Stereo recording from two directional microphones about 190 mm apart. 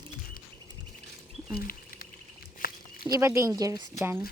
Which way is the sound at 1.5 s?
50° left (ahead or behind).